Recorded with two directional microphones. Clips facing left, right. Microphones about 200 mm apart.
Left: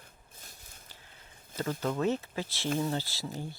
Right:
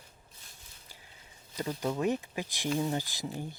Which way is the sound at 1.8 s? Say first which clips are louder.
Even; 15° right (ahead or behind).